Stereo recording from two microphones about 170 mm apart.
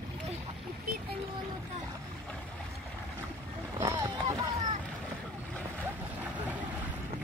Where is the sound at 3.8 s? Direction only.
20° right (ahead or behind).